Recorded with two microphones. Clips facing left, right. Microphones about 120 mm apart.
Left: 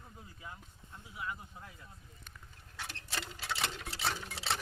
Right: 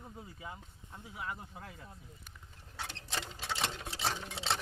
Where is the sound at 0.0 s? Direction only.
20° right (ahead or behind).